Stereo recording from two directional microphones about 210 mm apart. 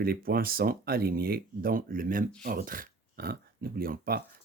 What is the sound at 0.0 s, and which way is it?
Speech, 45° right (ahead or behind).